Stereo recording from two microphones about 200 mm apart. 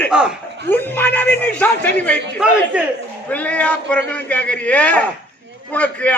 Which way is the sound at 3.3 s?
5° left (ahead or behind).